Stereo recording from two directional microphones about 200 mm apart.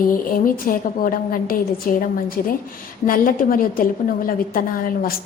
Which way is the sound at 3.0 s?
45° left (ahead or behind).